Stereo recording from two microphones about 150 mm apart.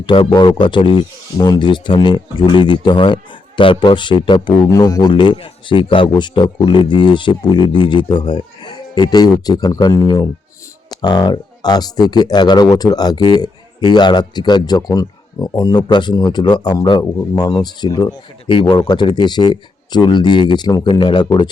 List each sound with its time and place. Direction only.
0.0 s speech: 30° left (ahead or behind)